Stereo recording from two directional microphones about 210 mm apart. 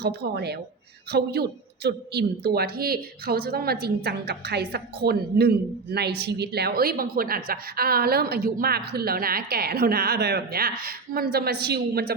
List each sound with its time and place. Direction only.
0.0 s a woman's voice: 50° right (ahead or behind)